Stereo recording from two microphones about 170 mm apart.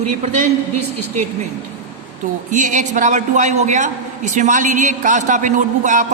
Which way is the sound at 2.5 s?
45° right (ahead or behind).